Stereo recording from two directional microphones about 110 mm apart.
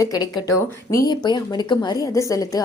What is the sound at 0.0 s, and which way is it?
Speech, 35° left (ahead or behind).